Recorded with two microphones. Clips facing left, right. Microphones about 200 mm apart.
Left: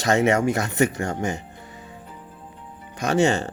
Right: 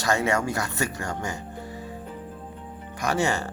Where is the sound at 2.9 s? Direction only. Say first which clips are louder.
Left 5 dB; 20° left (ahead or behind).